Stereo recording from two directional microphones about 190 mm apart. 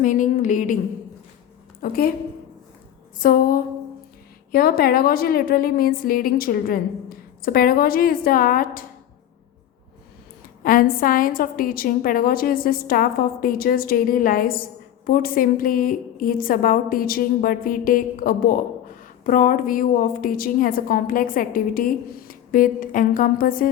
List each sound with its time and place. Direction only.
0.0 s a woman's voice: 40° left (ahead or behind)
1.8 s a woman's voice: 50° left (ahead or behind)
3.2 s a woman's voice: 50° left (ahead or behind)
10.6 s a woman's voice: 50° left (ahead or behind)